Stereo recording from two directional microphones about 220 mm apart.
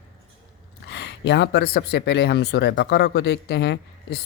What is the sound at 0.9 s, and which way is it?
Speech, 50° left (ahead or behind).